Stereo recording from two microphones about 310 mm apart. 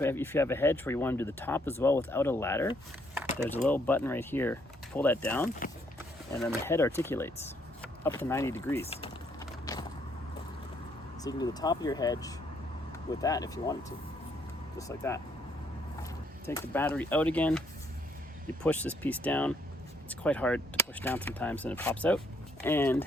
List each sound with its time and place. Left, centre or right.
0.0 s speech: centre
8.9 s typing: centre
9.7 s vehicle: centre
11.2 s speech: centre
14.8 s speech: centre
16.5 s speech: centre
18.6 s speech: centre